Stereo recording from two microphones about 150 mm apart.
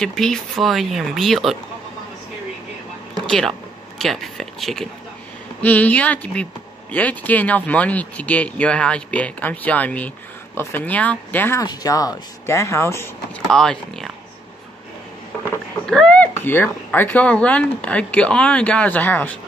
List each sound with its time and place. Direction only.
0.0 s speech: 5° left (ahead or behind)
3.3 s speech: 5° left (ahead or behind)
11.6 s speech: 25° left (ahead or behind)
13.5 s speech: 5° left (ahead or behind)
15.8 s speech: 5° left (ahead or behind)